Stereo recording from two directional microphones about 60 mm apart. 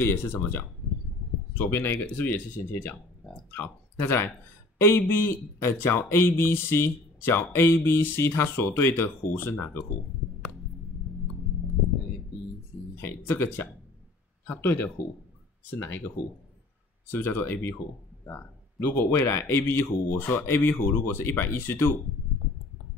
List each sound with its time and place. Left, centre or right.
0.0 s speech: left
1.7 s speech: left
12.9 s speech: left
17.1 s speech: left